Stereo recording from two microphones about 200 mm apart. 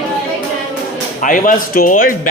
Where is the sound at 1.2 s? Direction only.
40° left (ahead or behind).